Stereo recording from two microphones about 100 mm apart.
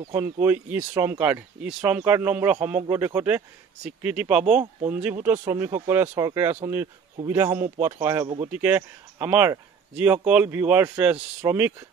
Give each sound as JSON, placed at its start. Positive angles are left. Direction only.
{"t": 0.2, "sound": "a man's voice", "side_deg": -20}